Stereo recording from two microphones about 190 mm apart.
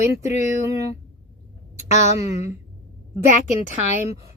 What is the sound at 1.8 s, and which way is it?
Speech, 40° left (ahead or behind).